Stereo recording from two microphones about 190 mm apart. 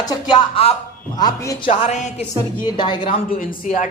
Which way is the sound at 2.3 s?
25° left (ahead or behind).